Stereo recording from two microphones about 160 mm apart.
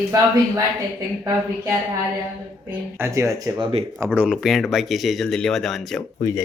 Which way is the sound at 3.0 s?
20° right (ahead or behind).